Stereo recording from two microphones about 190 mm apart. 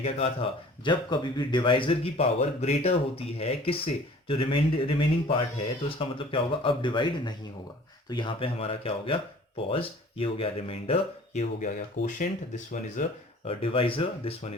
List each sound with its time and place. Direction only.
0.0 s speech: 35° left (ahead or behind)
0.9 s speech: 25° left (ahead or behind)